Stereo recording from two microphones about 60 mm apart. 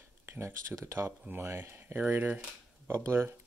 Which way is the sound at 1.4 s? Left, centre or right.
Right.